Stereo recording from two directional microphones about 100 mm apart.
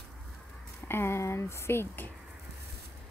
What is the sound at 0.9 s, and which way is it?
Speech, 25° left (ahead or behind).